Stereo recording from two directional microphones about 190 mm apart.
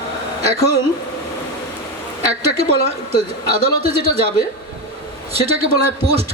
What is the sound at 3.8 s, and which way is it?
Speech, 30° right (ahead or behind).